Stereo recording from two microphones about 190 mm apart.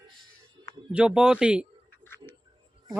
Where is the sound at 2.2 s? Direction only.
20° right (ahead or behind).